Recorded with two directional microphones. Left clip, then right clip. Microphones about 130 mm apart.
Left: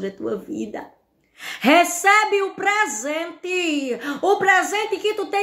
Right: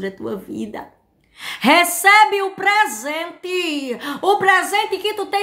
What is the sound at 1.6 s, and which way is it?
A woman's voice, 25° right (ahead or behind).